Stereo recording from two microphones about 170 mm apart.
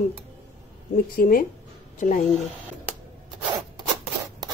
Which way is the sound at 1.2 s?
60° left (ahead or behind).